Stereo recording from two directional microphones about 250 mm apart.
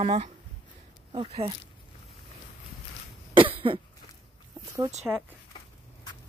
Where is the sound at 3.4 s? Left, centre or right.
Right.